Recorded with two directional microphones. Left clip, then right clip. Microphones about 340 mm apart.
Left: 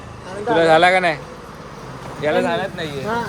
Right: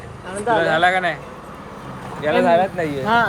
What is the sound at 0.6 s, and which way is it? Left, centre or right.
Speech, centre.